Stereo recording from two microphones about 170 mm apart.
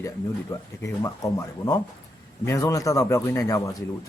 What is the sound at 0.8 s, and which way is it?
A man's voice, 20° left (ahead or behind).